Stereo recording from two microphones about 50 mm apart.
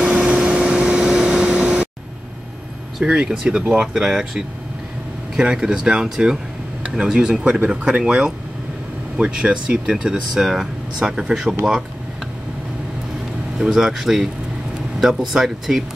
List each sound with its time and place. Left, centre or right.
0.4 s vehicle: centre
3.0 s speech: centre
6.8 s speech: right
10.3 s speech: centre
11.0 s speech: centre
13.6 s speech: centre